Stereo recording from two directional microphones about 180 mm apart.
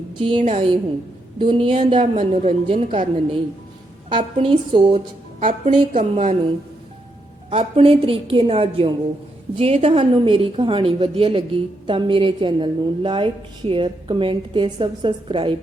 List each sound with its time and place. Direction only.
0.1 s a woman's voice: 30° right (ahead or behind)
2.3 s a woman's voice: 40° right (ahead or behind)
5.4 s a woman's voice: 50° right (ahead or behind)
7.5 s a woman's voice: 30° right (ahead or behind)